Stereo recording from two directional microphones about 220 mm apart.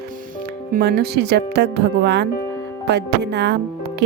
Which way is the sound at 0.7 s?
45° right (ahead or behind).